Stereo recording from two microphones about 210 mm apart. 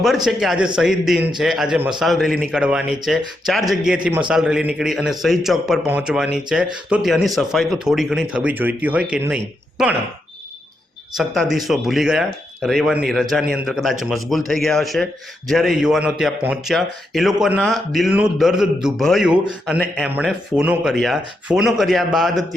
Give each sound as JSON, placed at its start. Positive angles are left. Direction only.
{"t": 0.3, "sound": "speech", "side_deg": 0}
{"t": 11.2, "sound": "speech", "side_deg": 0}